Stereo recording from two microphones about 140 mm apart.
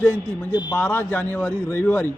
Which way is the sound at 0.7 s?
15° left (ahead or behind).